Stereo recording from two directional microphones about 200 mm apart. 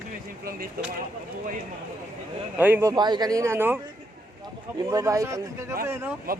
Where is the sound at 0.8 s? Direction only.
50° right (ahead or behind).